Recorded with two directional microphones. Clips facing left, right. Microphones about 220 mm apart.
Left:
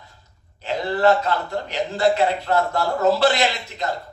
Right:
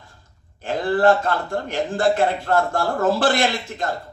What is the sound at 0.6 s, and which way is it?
Speech, 50° right (ahead or behind).